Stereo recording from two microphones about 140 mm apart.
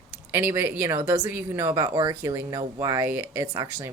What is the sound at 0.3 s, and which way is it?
Speech, 15° right (ahead or behind).